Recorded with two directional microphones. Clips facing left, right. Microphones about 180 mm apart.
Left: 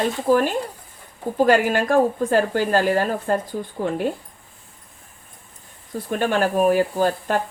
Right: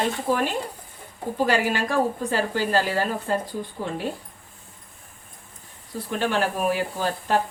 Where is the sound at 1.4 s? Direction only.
50° left (ahead or behind).